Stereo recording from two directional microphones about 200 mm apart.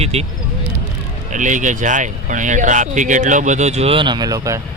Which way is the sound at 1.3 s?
40° right (ahead or behind).